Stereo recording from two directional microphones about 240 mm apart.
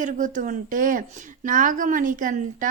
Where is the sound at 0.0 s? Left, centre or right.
Right.